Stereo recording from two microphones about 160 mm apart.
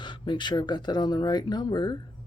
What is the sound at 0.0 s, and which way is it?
Speech, 30° left (ahead or behind).